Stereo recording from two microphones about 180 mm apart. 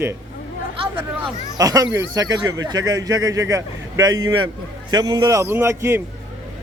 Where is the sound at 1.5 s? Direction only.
20° right (ahead or behind).